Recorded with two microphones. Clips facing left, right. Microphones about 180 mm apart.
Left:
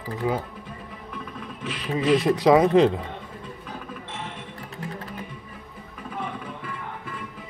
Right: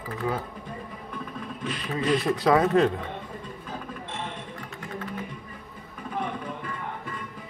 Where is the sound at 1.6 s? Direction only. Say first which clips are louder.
Left 3 dB; 5° left (ahead or behind).